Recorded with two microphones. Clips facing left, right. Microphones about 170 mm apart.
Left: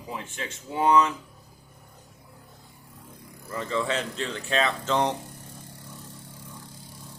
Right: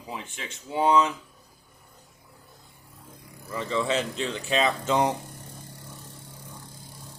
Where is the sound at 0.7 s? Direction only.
20° right (ahead or behind).